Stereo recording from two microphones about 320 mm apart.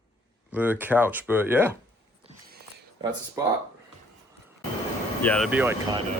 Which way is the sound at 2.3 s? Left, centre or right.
Right.